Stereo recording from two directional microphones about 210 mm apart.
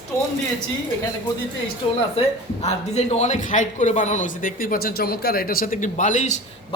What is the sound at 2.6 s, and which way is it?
A man's voice, 30° left (ahead or behind).